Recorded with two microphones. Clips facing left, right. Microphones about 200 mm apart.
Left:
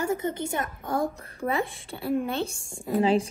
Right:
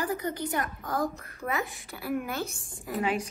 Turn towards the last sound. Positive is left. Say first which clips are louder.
# left 7 dB
turn(degrees=30)  # may be behind; listen again after turning